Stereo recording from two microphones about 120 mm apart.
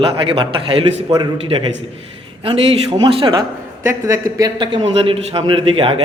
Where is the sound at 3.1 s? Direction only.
50° right (ahead or behind).